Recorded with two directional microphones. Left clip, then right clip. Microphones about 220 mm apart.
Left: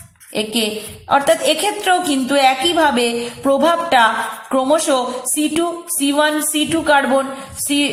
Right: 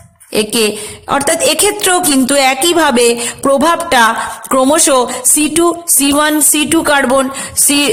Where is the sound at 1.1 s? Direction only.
50° right (ahead or behind).